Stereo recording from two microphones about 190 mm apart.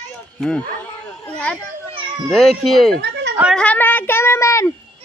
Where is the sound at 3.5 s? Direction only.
5° left (ahead or behind).